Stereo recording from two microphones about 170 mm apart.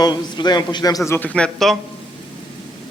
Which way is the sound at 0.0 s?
25° left (ahead or behind).